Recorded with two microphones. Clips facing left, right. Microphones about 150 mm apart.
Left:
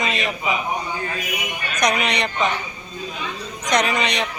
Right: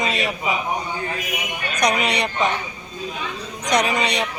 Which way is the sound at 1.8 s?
10° right (ahead or behind).